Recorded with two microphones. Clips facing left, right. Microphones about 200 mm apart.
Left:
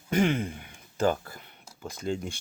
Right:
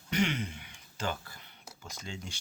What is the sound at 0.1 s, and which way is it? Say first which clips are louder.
Speech: left 6 dB; 50° left (ahead or behind).